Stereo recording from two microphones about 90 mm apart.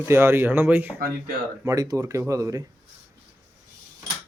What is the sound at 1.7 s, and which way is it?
Speech, 40° right (ahead or behind).